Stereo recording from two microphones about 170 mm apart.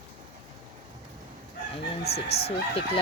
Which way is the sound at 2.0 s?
70° left (ahead or behind).